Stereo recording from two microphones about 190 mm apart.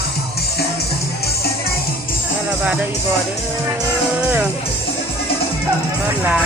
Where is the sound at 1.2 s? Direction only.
55° left (ahead or behind).